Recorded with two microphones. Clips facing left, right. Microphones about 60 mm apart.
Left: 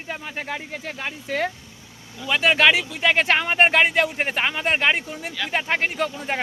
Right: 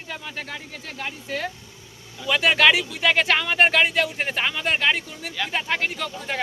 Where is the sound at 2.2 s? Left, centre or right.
Centre.